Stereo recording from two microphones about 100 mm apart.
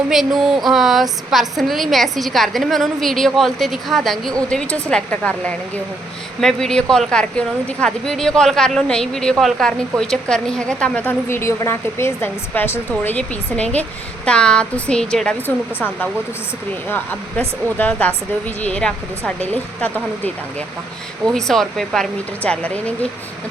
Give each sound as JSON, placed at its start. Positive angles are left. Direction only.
{"t": 0.1, "sound": "a woman's voice", "side_deg": -5}
{"t": 11.3, "sound": "a woman's voice", "side_deg": 25}
{"t": 15.4, "sound": "a woman's voice", "side_deg": 20}
{"t": 21.3, "sound": "a woman's voice", "side_deg": 5}